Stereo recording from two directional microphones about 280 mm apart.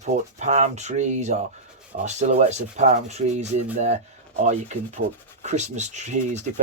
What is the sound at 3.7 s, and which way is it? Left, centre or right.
Speech, right.